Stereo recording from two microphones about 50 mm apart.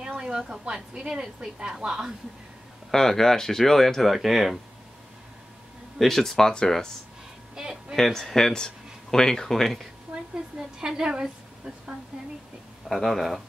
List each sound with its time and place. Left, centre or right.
0.2 s a woman's voice: centre
2.9 s speech: centre
5.9 s speech: centre
7.6 s a woman's voice: centre
7.9 s speech: centre
10.1 s hair dryer: right
10.8 s a woman's voice: centre
12.8 s speech: centre